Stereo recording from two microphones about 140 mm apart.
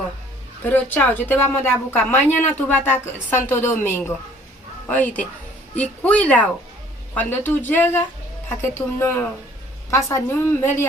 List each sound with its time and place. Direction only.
0.6 s a woman's voice: 15° left (ahead or behind)